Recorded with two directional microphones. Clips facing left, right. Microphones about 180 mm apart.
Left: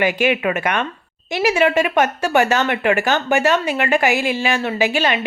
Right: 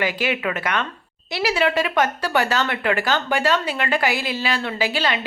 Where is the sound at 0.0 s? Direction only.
15° left (ahead or behind).